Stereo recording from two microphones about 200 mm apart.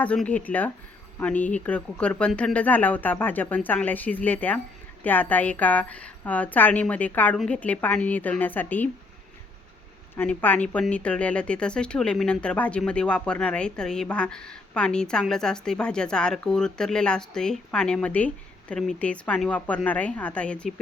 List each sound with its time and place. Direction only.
0.0 s a woman's voice: 5° left (ahead or behind)
10.2 s a woman's voice: 10° left (ahead or behind)